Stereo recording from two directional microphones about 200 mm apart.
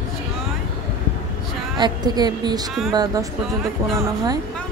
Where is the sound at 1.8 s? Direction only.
20° right (ahead or behind).